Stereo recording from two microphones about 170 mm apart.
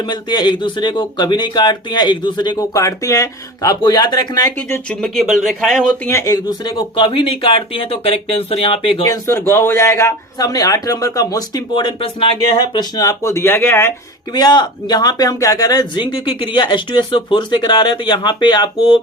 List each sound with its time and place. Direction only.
0.1 s a man's voice: 25° left (ahead or behind)
4.9 s speech: 5° left (ahead or behind)
6.1 s speech: 20° left (ahead or behind)
9.0 s a man's voice: 15° left (ahead or behind)
14.3 s a man's voice: 25° left (ahead or behind)